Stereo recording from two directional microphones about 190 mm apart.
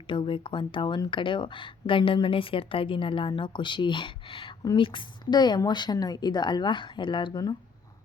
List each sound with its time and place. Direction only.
0.1 s speech: 25° left (ahead or behind)